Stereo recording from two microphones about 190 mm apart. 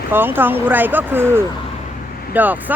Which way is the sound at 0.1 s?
10° right (ahead or behind).